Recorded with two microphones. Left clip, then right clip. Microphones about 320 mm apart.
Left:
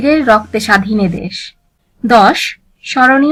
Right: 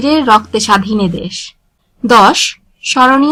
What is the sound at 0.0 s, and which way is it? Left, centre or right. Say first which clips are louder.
A woman's voice: right 1 dB; centre.